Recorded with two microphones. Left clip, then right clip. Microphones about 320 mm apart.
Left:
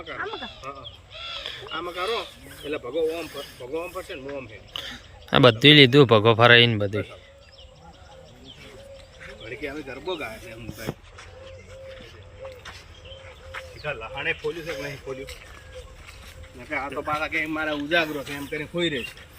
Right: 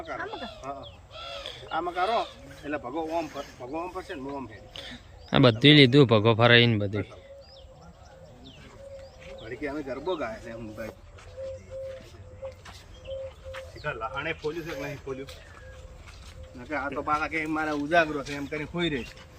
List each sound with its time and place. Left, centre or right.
1.4 s speech: centre
9.5 s speech: centre
14.2 s speech: centre
16.6 s speech: centre